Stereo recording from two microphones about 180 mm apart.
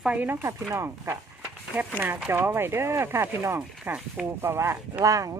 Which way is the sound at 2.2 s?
10° right (ahead or behind).